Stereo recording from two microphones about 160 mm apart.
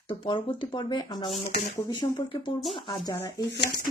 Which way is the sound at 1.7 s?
30° left (ahead or behind).